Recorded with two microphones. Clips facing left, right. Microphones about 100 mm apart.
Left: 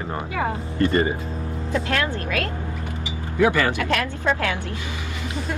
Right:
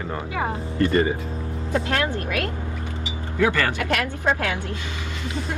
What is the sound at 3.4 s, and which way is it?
Speech, 15° left (ahead or behind).